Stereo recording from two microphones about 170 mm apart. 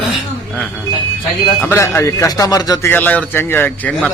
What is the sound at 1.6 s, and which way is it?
A man's voice, 15° left (ahead or behind).